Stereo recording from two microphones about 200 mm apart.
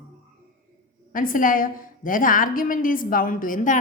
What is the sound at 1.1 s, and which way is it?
A woman's voice, 45° left (ahead or behind).